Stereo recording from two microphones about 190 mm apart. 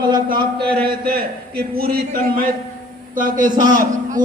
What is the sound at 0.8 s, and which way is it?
A man's voice, 50° right (ahead or behind).